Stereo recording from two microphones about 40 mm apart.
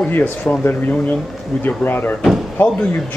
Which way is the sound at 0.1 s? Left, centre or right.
Left.